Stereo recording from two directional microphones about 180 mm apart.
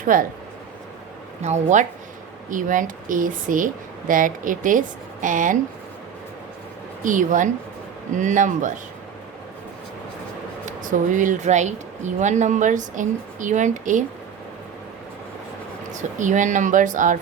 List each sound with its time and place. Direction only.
0.0 s speech: 50° right (ahead or behind)
1.4 s speech: 40° right (ahead or behind)
7.0 s speech: 45° right (ahead or behind)
10.7 s speech: 45° right (ahead or behind)
15.9 s speech: 45° right (ahead or behind)